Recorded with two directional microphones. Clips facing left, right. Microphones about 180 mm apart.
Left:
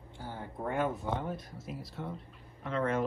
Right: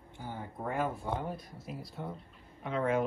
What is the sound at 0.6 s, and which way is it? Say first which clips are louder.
Speech: left 2 dB; centre (ahead or behind).